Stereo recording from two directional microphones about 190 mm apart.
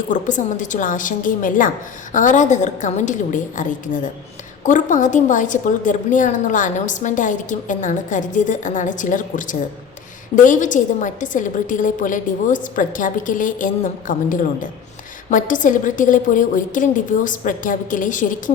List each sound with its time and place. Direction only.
0.1 s a woman's voice: 40° left (ahead or behind)